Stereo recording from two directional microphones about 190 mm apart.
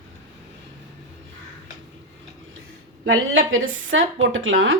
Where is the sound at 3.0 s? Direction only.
90° right.